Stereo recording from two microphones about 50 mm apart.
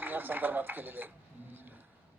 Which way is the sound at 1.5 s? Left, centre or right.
Right.